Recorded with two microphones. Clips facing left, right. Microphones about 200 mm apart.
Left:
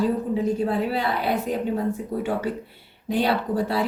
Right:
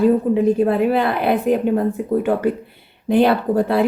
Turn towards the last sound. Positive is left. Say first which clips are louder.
# right 7 dB
turn(degrees=-55)  # may be behind; listen again after turning